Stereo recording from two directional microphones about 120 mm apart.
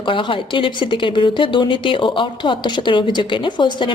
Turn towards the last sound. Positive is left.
turn(degrees=40)  # may be behind; listen again after turning